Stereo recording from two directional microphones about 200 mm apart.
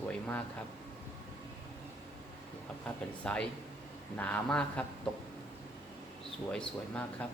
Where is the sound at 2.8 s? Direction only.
5° left (ahead or behind).